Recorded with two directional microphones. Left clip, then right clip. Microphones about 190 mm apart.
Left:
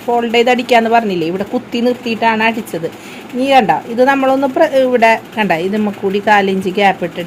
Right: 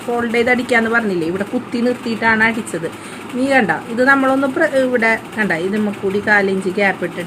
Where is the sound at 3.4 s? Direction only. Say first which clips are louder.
Left 5 dB; 35° left (ahead or behind).